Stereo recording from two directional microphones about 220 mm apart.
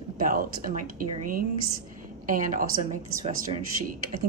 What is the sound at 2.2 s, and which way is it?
A woman's voice, 35° right (ahead or behind).